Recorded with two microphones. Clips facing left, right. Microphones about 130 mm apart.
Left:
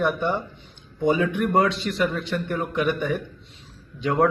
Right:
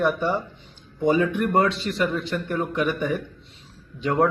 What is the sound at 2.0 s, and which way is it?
Speech, centre (ahead or behind).